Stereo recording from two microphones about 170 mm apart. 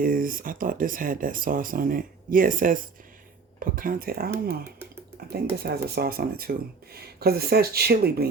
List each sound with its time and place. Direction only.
0.0 s speech: 55° right (ahead or behind)
5.3 s speech: 65° right (ahead or behind)